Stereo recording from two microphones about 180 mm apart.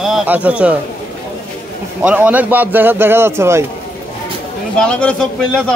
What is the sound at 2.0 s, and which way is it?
Speech, 5° right (ahead or behind).